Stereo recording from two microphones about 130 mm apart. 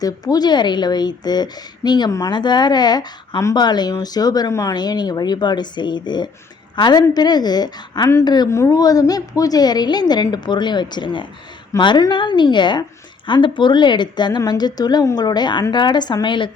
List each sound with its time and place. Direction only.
0.0 s a woman's voice: 30° left (ahead or behind)
8.4 s a woman's voice: 20° left (ahead or behind)